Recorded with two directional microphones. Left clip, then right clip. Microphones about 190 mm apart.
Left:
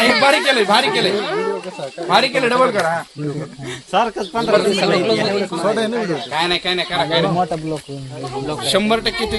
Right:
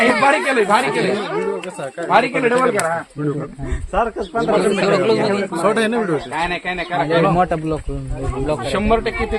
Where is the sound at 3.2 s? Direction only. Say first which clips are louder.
Right 3 dB; 55° right (ahead or behind).